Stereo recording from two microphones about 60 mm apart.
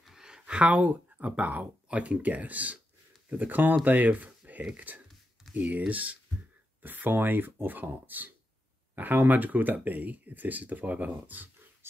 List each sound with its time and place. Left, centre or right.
0.0 s speech: centre; by 11.9 s right